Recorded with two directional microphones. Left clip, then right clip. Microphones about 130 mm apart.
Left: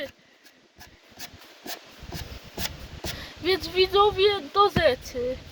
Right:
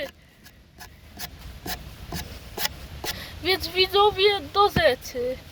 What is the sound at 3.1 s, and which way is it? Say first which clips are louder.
Speech: even; 15° left (ahead or behind).